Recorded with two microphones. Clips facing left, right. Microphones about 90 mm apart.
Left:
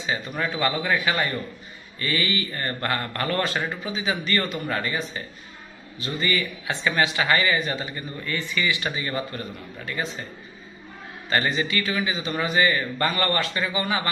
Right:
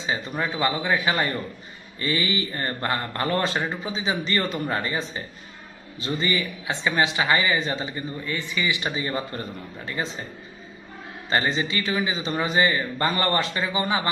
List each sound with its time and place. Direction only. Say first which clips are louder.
0.0 s speech: even; 25° right (ahead or behind)
11.3 s speech: even; 20° right (ahead or behind)